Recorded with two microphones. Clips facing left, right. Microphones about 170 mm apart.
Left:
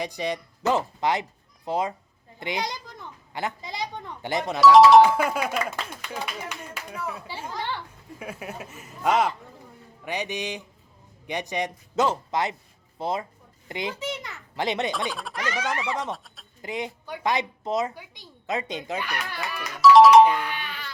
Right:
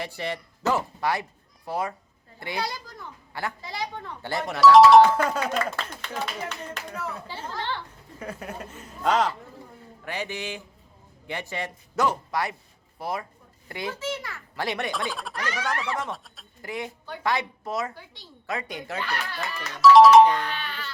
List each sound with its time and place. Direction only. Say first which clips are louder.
0.0 s a woman's voice: left 3 dB; 15° left (ahead or behind)
4.6 s a woman's voice: even; centre (ahead or behind); by 14.9 s 20° left (ahead or behind)
15.1 s speech: even; centre (ahead or behind)
15.5 s a woman's voice: left 1 dB; 20° left (ahead or behind)
16.1 s speech: even; centre (ahead or behind)
16.6 s a woman's voice: left 2 dB; 20° left (ahead or behind)
19.8 s speech: even; centre (ahead or behind)